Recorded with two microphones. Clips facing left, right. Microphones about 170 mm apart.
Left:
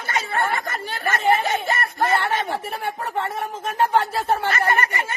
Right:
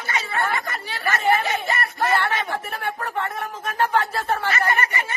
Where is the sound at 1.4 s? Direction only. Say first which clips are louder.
Left 2 dB; 45° left (ahead or behind).